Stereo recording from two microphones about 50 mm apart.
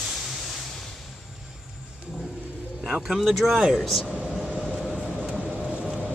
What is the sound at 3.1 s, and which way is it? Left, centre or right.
Speech, centre.